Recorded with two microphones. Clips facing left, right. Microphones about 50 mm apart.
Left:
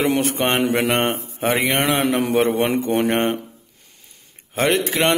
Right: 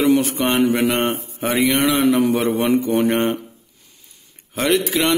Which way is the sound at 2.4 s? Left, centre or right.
Left.